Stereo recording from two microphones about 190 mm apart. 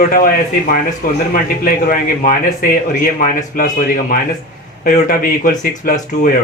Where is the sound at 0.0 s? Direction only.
50° left (ahead or behind).